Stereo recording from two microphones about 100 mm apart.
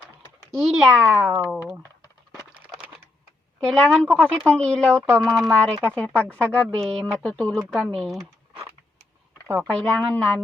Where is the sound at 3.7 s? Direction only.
5° left (ahead or behind).